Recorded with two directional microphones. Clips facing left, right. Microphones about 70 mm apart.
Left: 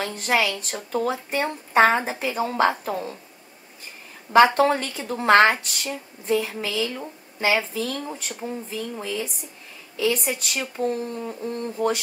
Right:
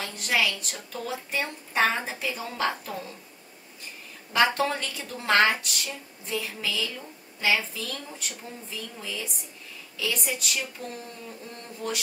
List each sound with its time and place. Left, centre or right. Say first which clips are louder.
0.0 s a woman's voice: left 4 dB; left
4.6 s a woman's voice: left 8 dB; left